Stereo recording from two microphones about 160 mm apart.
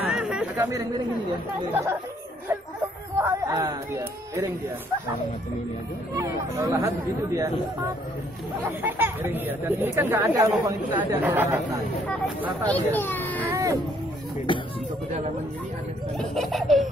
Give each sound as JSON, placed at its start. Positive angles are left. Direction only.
{"t": 0.0, "sound": "chatter", "side_deg": -5}
{"t": 1.7, "sound": "speech", "side_deg": -15}
{"t": 3.2, "sound": "speech", "side_deg": -20}
{"t": 6.1, "sound": "speech", "side_deg": -20}
{"t": 8.6, "sound": "speech", "side_deg": -10}
{"t": 12.6, "sound": "a child's voice", "side_deg": 10}
{"t": 13.5, "sound": "baby cry", "side_deg": -20}
{"t": 14.5, "sound": "music", "side_deg": 30}
{"t": 16.2, "sound": "baby laughter", "side_deg": 0}